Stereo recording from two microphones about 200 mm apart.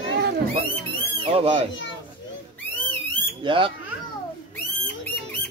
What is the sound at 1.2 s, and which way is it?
Speech, 30° right (ahead or behind).